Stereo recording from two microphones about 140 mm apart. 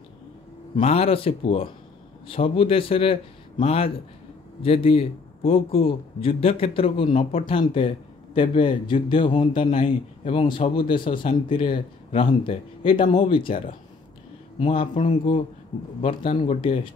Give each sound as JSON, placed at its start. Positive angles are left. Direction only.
{"t": 0.7, "sound": "a man's voice", "side_deg": 45}
{"t": 9.7, "sound": "speech", "side_deg": 55}
{"t": 10.2, "sound": "a man's voice", "side_deg": 40}
{"t": 14.7, "sound": "a man's voice", "side_deg": 40}